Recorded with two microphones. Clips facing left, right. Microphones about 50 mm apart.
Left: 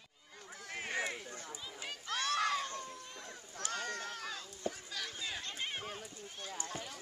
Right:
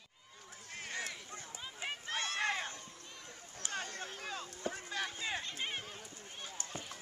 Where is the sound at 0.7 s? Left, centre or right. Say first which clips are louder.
Left 4 dB; left.